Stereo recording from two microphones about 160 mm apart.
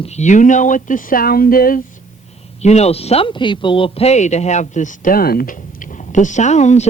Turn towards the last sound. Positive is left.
turn(degrees=45)  # may be behind; listen again after turning